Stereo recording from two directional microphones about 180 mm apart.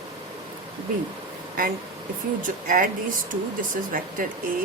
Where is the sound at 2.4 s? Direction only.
50° right (ahead or behind).